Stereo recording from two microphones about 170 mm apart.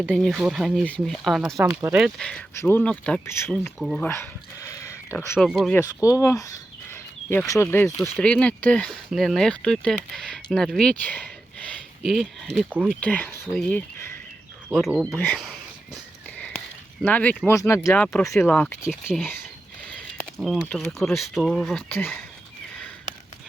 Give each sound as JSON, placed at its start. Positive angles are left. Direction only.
{"t": 0.1, "sound": "speech", "side_deg": 0}
{"t": 3.8, "sound": "speech", "side_deg": 0}
{"t": 4.0, "sound": "speech", "side_deg": 15}
{"t": 5.4, "sound": "speech", "side_deg": 0}
{"t": 5.7, "sound": "speech", "side_deg": 20}
{"t": 8.1, "sound": "speech", "side_deg": 5}
{"t": 13.0, "sound": "speech", "side_deg": 10}
{"t": 14.8, "sound": "speech", "side_deg": -5}
{"t": 15.1, "sound": "speech", "side_deg": 10}
{"t": 17.0, "sound": "speech", "side_deg": 10}
{"t": 20.4, "sound": "speech", "side_deg": 0}